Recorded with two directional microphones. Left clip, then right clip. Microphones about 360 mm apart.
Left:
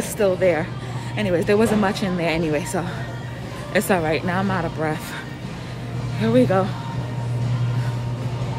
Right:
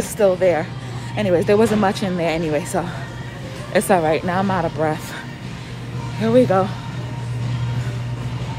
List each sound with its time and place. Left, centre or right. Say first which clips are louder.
0.2 s speech: right 3 dB; centre
6.1 s speech: right 3 dB; centre